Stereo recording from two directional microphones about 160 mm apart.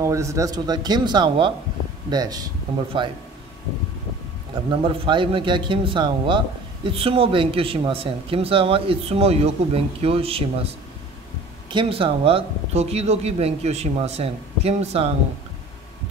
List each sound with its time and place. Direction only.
0.0 s speech: 20° right (ahead or behind)
4.6 s a man's voice: 30° right (ahead or behind)
11.7 s a man's voice: 35° right (ahead or behind)